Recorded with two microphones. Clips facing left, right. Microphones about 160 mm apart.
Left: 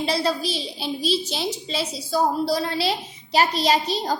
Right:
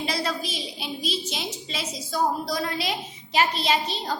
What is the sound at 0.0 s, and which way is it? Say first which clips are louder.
A woman's voice: left 5 dB; 30° left (ahead or behind).